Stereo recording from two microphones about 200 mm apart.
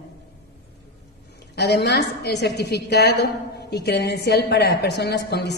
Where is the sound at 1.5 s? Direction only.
55° left (ahead or behind).